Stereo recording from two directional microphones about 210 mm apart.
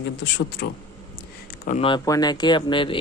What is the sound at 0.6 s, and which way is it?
Speech, 55° left (ahead or behind).